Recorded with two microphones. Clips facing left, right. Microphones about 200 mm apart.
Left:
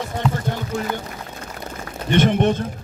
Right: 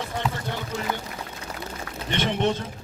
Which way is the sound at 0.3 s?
50° left (ahead or behind).